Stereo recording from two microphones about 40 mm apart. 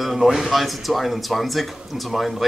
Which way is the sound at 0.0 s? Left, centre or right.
Centre.